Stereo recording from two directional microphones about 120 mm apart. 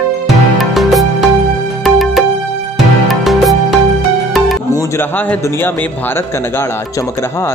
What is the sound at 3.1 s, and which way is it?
Music, centre (ahead or behind).